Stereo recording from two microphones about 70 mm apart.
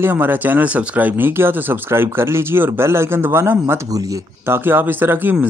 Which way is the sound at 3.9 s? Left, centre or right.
Right.